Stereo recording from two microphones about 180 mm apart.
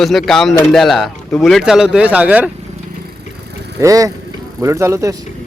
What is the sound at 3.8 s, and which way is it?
Speech, 20° right (ahead or behind).